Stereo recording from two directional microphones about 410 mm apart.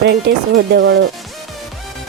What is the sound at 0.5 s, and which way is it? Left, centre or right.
Speech, right.